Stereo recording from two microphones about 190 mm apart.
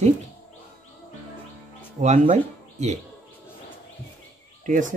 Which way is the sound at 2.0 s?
35° right (ahead or behind).